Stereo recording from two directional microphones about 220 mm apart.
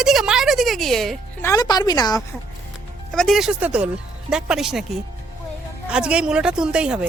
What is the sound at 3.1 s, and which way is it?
A woman's voice, centre (ahead or behind).